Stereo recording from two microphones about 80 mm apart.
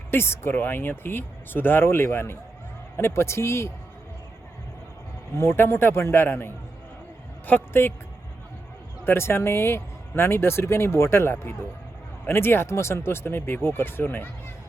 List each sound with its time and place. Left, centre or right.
0.1 s speech: left
5.4 s speech: left
9.0 s speech: left